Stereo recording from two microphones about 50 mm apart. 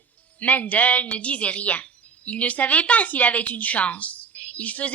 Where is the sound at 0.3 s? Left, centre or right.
Left.